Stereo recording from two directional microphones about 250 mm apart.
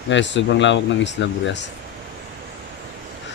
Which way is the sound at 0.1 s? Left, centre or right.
Left.